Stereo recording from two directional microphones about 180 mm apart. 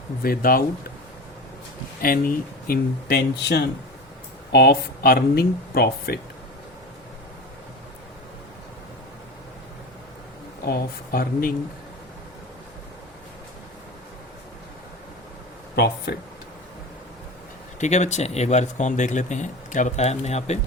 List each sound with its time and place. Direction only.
0.2 s speech: 55° left (ahead or behind)
2.0 s speech: 55° left (ahead or behind)
10.7 s speech: 55° left (ahead or behind)
15.7 s speech: 65° left (ahead or behind)
17.7 s speech: 40° left (ahead or behind)